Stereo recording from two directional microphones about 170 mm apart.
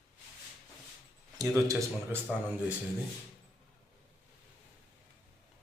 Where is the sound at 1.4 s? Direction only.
20° right (ahead or behind).